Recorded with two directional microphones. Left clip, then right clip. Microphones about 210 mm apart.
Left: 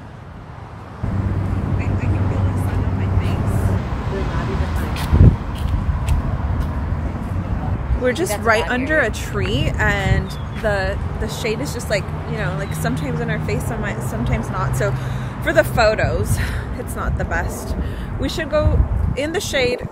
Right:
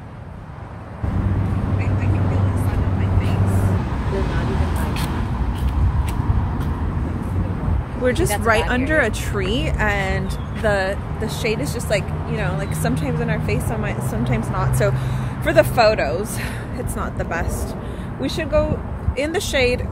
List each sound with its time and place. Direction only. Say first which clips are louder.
8.0 s speech: even; centre (ahead or behind)
10.6 s speech: right 1 dB; 15° right (ahead or behind)